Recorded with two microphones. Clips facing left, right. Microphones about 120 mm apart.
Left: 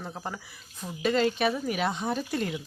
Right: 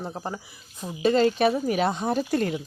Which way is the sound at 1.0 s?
35° right (ahead or behind).